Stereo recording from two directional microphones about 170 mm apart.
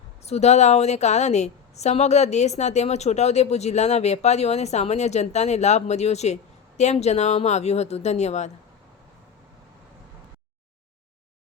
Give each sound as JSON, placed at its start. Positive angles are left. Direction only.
{"t": 0.3, "sound": "a woman's voice", "side_deg": 40}